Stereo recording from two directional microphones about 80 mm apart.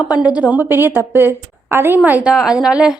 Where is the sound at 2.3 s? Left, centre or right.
Centre.